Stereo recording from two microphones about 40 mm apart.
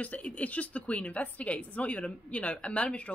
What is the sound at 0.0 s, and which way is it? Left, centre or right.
A woman's voice, left.